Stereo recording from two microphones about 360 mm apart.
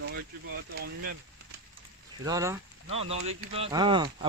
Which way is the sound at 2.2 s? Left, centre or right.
Centre.